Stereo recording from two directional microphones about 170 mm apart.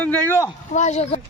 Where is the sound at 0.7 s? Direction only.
40° left (ahead or behind).